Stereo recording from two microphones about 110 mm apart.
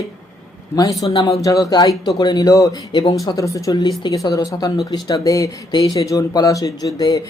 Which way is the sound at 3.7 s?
40° left (ahead or behind).